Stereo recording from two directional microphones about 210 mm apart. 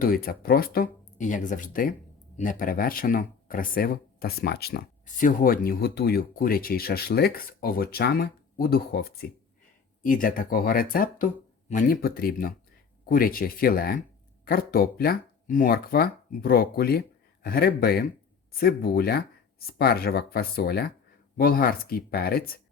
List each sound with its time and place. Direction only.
0.0 s speech: 45° left (ahead or behind)